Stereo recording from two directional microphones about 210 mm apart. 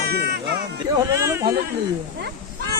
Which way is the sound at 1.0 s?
15° right (ahead or behind).